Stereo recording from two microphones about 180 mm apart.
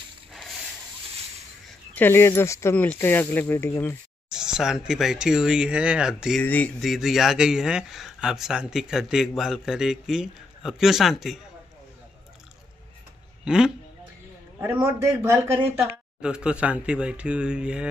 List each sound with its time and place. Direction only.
0.3 s a sound: centre (ahead or behind)
2.0 s speech: 10° left (ahead or behind)
4.3 s speech: 5° right (ahead or behind)
6.4 s speech: 10° left (ahead or behind)
13.5 s speech: 5° right (ahead or behind)
14.6 s a man's voice: 15° right (ahead or behind)